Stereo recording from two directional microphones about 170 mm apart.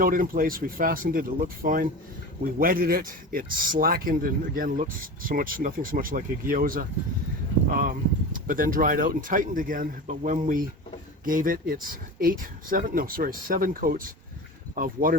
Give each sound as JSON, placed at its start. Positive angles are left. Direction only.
{"t": 0.0, "sound": "a man's voice", "side_deg": -55}